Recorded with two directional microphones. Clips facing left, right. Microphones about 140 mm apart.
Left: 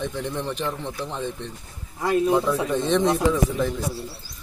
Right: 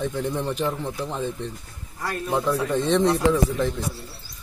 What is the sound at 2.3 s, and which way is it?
Speech, centre (ahead or behind).